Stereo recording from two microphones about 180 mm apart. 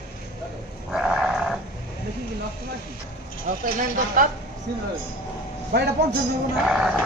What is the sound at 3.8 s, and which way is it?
Speech, 45° right (ahead or behind).